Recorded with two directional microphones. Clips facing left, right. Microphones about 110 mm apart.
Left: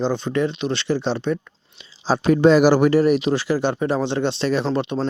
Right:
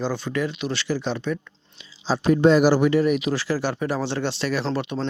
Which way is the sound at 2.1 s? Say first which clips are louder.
Left 2 dB; 80° left.